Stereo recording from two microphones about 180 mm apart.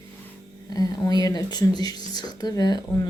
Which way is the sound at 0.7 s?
20° left (ahead or behind).